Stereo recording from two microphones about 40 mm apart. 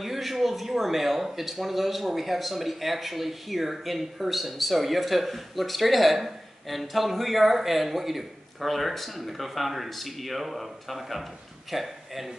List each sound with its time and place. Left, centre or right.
0.0 s a man's voice: centre